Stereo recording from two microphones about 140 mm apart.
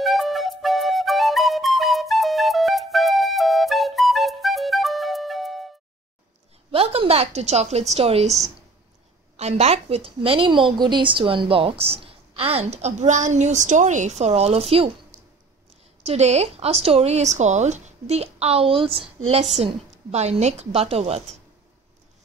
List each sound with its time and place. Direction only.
0.0 s flute: centre (ahead or behind)
6.7 s a woman's voice: 40° right (ahead or behind)
9.4 s speech: 50° right (ahead or behind)
16.0 s speech: 50° right (ahead or behind)